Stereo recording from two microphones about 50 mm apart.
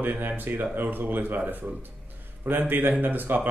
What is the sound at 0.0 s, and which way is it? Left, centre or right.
Speech, right.